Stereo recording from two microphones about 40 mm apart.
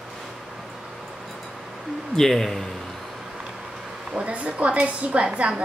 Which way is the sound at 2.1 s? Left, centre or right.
Centre.